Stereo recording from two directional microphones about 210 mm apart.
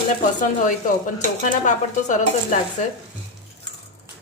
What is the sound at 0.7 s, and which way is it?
Speech, 35° left (ahead or behind).